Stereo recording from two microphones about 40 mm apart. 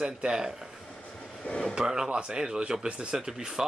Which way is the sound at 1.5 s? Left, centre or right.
Left.